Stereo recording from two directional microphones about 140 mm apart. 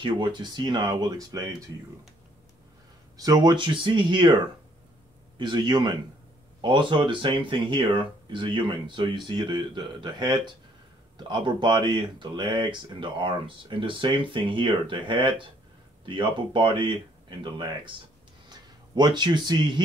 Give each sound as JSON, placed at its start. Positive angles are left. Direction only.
{"t": 0.0, "sound": "speech", "side_deg": -35}
{"t": 3.2, "sound": "speech", "side_deg": -25}
{"t": 5.4, "sound": "speech", "side_deg": -35}